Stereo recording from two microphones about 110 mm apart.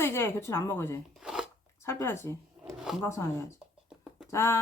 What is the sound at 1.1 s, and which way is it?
Speech, 5° right (ahead or behind).